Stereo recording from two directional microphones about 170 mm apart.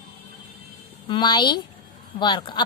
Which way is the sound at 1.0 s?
25° left (ahead or behind).